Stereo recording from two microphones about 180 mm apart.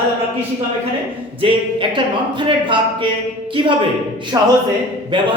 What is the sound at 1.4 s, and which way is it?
Speech, 25° right (ahead or behind).